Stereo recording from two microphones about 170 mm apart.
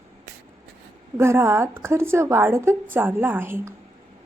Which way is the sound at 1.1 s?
15° right (ahead or behind).